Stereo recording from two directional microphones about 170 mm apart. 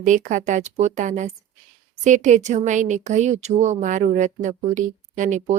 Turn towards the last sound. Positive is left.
turn(degrees=-45)  # may be behind; listen again after turning